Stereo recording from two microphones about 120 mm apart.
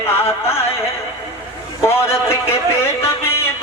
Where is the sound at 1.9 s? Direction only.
20° left (ahead or behind).